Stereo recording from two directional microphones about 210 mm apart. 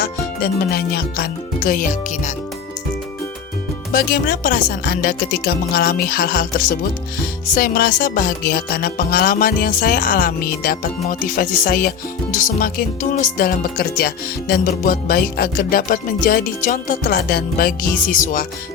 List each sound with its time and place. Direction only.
0.0 s music: 50° left (ahead or behind)
3.9 s music: 45° left (ahead or behind)
18.0 s speech: 40° left (ahead or behind)